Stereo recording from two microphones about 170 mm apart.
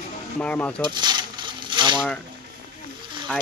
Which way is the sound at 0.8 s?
25° right (ahead or behind).